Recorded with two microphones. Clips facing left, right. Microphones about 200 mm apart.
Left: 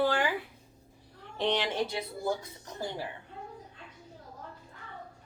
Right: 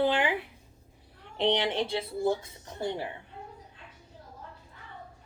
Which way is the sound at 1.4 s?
20° right (ahead or behind).